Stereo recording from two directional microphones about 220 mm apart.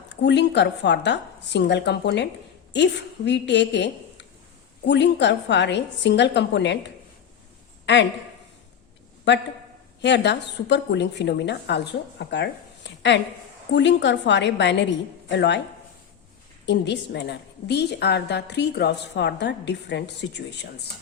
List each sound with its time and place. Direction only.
0.2 s a woman's voice: 50° left (ahead or behind)
10.0 s a woman's voice: 50° left (ahead or behind)
16.6 s a woman's voice: 55° left (ahead or behind)